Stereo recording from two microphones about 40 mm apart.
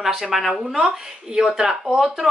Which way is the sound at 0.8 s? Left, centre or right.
Centre.